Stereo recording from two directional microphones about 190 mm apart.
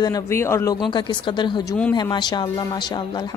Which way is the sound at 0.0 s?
15° left (ahead or behind).